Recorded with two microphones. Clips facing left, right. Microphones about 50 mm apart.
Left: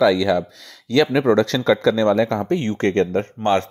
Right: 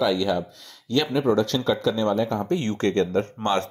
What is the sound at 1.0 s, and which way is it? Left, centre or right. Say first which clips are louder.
Speech: left 4 dB; left.